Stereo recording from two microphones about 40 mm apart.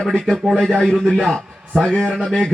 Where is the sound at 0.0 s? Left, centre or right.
Centre.